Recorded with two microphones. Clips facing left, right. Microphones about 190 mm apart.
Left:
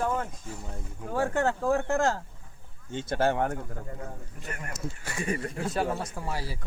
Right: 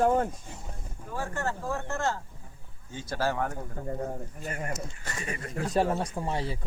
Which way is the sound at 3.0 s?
25° left (ahead or behind).